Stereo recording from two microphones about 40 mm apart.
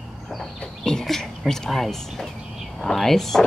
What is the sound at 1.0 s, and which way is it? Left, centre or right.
Speech, centre.